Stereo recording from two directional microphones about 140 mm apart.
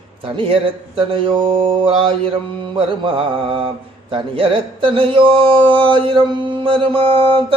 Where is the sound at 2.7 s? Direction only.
40° right (ahead or behind).